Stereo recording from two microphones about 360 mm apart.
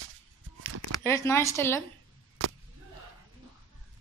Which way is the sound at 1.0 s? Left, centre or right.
Centre.